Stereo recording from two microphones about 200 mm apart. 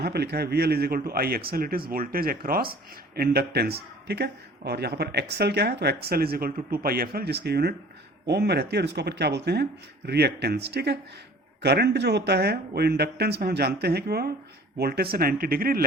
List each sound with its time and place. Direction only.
0.0 s speech: 55° right (ahead or behind)